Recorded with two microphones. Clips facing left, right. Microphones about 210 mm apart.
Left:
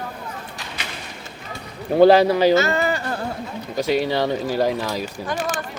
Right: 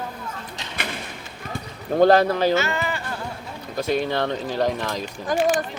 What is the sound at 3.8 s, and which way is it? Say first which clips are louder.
Speech: left 2 dB; 10° left (ahead or behind).